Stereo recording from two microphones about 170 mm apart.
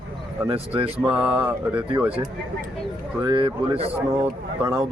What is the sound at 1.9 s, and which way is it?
Speech, 35° right (ahead or behind).